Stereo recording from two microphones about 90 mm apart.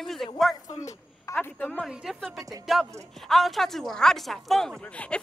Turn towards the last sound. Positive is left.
turn(degrees=15)  # may be behind; listen again after turning